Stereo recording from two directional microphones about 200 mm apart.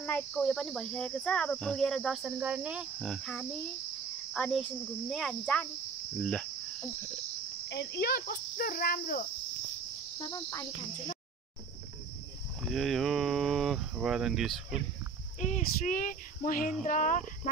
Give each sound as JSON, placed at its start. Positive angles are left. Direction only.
{"t": 0.0, "sound": "insect", "side_deg": 10}
{"t": 7.6, "sound": "cricket", "side_deg": 60}
{"t": 10.1, "sound": "cricket", "side_deg": 20}
{"t": 12.6, "sound": "insect", "side_deg": 0}
{"t": 15.4, "sound": "speech", "side_deg": 40}